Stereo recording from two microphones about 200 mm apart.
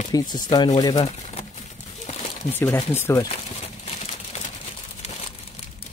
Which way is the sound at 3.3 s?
30° left (ahead or behind).